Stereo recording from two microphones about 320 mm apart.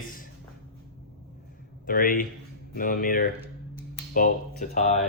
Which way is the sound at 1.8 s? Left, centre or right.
Left.